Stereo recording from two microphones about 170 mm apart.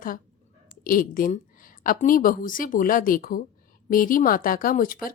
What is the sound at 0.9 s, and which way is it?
Speech, 55° left (ahead or behind).